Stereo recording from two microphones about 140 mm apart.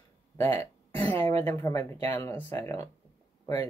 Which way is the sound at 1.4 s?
20° left (ahead or behind).